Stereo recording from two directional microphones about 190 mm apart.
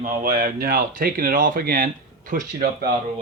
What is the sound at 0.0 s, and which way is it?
Speech, 45° right (ahead or behind).